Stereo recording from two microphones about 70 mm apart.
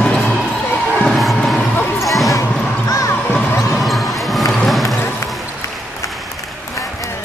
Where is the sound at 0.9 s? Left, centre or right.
Centre.